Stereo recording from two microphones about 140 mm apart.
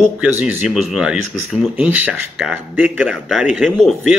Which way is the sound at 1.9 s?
10° right (ahead or behind).